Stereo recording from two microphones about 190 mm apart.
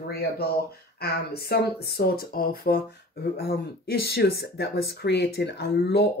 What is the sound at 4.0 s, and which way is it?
Speech, 55° left (ahead or behind).